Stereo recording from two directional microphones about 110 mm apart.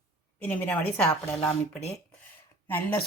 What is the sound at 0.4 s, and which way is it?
Speech, 15° left (ahead or behind).